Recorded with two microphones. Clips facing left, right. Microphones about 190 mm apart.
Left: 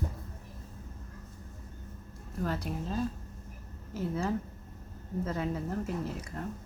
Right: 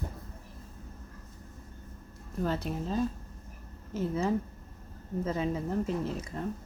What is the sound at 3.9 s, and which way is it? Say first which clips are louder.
Speech: right 3 dB; 20° right (ahead or behind).